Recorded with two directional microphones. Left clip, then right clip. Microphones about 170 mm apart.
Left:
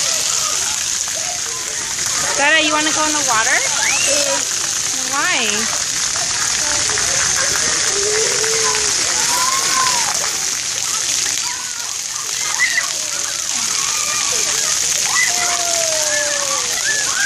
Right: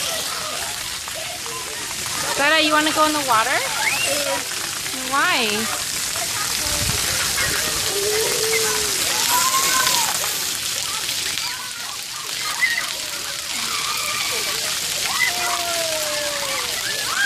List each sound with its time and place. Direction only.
2.4 s speech: 25° right (ahead or behind)
5.1 s speech: 30° right (ahead or behind)